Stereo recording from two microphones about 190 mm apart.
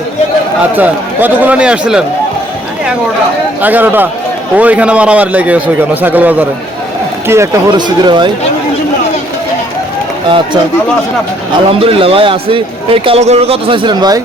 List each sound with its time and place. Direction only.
0.8 s a man's voice: 10° right (ahead or behind)
3.6 s a man's voice: 10° right (ahead or behind)
10.2 s a man's voice: 25° right (ahead or behind)
11.8 s a man's voice: 30° right (ahead or behind)